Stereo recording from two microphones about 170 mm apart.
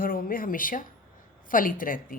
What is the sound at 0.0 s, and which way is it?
A woman's voice, 55° left (ahead or behind).